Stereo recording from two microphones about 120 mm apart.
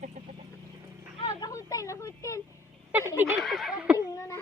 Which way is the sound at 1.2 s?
30° left (ahead or behind).